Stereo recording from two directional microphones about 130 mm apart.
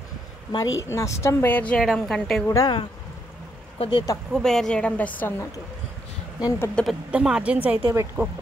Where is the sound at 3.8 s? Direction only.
35° left (ahead or behind).